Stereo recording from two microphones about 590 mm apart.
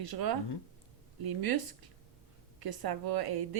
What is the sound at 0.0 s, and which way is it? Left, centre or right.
Speech, right.